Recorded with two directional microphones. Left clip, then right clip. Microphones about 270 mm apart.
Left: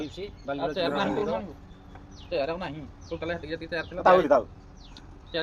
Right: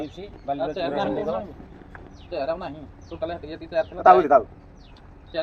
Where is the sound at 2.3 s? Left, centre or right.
Left.